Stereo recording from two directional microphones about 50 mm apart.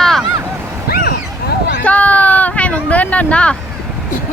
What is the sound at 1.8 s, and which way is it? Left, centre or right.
Speech, left.